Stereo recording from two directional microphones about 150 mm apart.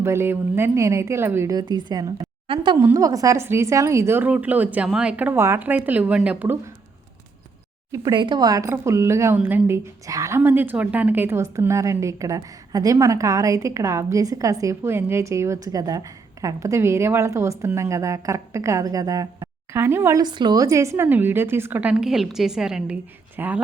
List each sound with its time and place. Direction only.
0.0 s a woman's voice: 15° right (ahead or behind)
2.7 s a woman's voice: 20° right (ahead or behind)
8.1 s a woman's voice: 30° right (ahead or behind); by 20.2 s 15° right (ahead or behind)
20.2 s a woman's voice: 30° right (ahead or behind); by 23.6 s 10° right (ahead or behind)